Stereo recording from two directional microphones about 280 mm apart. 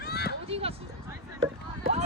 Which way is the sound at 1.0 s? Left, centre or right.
Centre.